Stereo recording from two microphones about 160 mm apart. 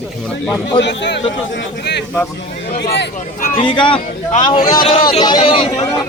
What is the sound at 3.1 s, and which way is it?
Speech, 60° left (ahead or behind).